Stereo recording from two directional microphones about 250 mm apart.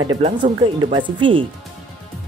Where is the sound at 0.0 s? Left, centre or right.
Centre.